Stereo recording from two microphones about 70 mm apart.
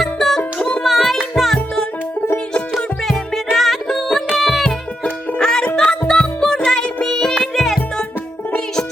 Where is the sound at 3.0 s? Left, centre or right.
Centre.